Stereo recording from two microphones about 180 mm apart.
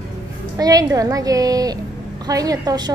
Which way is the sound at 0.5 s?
20° right (ahead or behind).